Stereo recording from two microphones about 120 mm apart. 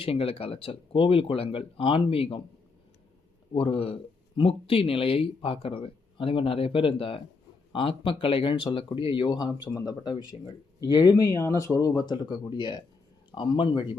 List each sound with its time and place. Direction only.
0.0 s speech: 50° left (ahead or behind)
3.5 s speech: 50° left (ahead or behind)